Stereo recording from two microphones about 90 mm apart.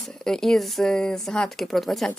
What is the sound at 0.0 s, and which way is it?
A woman's voice, 5° left (ahead or behind).